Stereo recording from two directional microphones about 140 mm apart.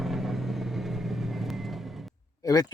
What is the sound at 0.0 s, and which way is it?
Vehicle, centre (ahead or behind).